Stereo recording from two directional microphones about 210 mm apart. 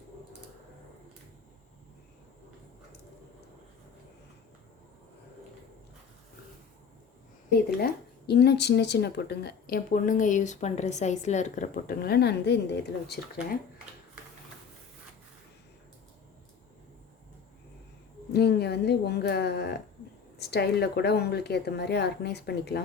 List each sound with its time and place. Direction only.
7.8 s speech: 50° left (ahead or behind)
18.3 s speech: 50° left (ahead or behind)